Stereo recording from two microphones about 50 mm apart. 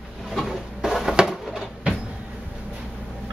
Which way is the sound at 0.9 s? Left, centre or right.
Centre.